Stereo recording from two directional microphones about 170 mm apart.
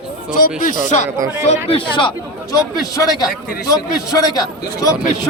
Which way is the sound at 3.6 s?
20° left (ahead or behind).